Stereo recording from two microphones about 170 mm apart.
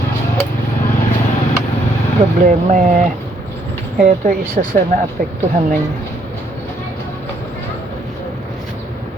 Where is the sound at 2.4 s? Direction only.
50° right (ahead or behind).